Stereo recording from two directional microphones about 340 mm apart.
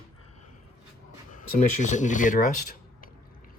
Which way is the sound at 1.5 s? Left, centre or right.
Left.